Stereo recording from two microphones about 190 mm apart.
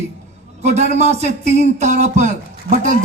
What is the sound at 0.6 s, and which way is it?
Speech, 35° right (ahead or behind).